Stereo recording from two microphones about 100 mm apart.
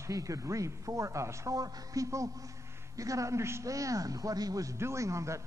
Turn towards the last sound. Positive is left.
turn(degrees=-30)  # may be behind; listen again after turning